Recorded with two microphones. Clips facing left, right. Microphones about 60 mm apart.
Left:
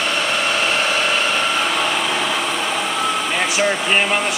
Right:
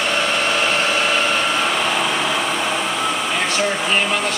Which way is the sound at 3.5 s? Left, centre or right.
Centre.